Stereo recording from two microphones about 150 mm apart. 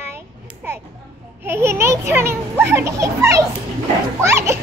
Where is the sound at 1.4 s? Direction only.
15° right (ahead or behind).